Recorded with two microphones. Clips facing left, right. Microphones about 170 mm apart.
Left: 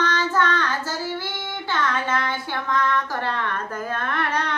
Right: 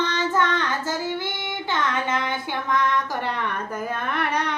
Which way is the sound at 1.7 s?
20° right (ahead or behind).